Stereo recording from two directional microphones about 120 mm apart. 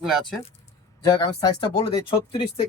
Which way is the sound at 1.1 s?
40° left (ahead or behind).